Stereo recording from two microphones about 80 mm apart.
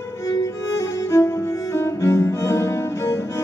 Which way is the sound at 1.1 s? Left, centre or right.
Left.